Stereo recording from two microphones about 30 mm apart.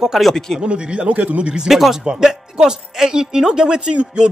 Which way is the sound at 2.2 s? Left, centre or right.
Centre.